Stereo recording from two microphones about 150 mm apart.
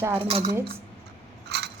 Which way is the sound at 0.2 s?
40° right (ahead or behind).